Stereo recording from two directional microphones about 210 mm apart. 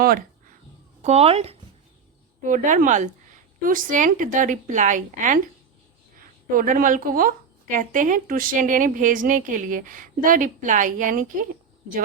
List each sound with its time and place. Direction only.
1.0 s speech: 30° right (ahead or behind)
2.4 s a woman's voice: 40° right (ahead or behind)